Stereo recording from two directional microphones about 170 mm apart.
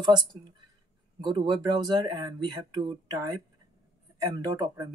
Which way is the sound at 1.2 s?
25° right (ahead or behind).